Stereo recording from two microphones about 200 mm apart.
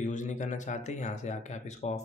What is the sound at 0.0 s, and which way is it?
Speech, 40° left (ahead or behind).